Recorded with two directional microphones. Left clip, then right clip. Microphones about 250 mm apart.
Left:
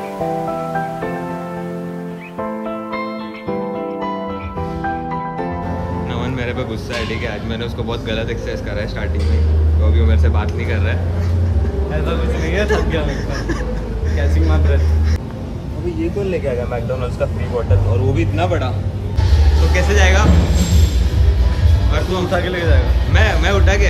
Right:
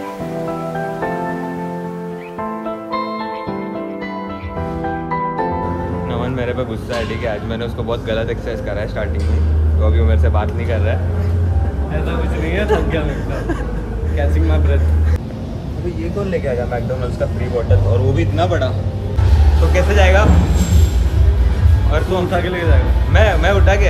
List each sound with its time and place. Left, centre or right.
6.0 s speech: centre
9.8 s speech: centre
14.2 s speech: centre
16.4 s speech: centre
18.2 s speech: left
19.7 s speech: centre
21.9 s speech: centre